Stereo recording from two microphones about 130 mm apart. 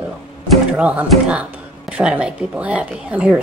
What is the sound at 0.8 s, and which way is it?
A woman's voice, 10° right (ahead or behind).